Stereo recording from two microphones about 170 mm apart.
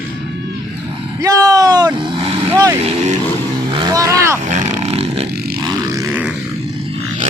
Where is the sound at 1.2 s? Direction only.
20° right (ahead or behind).